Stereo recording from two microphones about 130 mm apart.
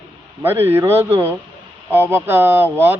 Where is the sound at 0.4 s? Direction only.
15° right (ahead or behind).